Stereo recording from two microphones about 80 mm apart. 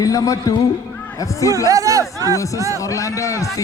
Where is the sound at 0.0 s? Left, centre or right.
Left.